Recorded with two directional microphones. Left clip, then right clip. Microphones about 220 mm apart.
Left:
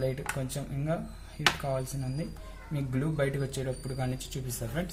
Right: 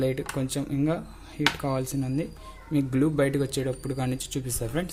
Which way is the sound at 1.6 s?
50° right (ahead or behind).